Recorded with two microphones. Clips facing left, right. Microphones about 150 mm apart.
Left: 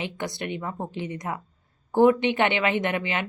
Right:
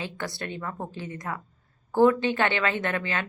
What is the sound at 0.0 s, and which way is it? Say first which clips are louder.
A woman's voice: left 3 dB; 20° left (ahead or behind).